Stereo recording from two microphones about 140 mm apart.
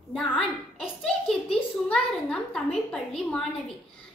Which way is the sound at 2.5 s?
5° left (ahead or behind).